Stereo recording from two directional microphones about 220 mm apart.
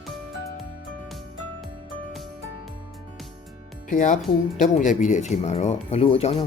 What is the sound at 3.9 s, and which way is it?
Speech, 35° left (ahead or behind).